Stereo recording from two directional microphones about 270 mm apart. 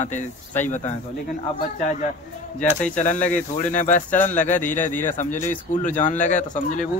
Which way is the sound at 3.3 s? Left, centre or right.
Left.